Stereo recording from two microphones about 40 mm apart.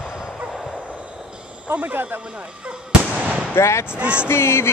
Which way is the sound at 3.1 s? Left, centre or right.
Right.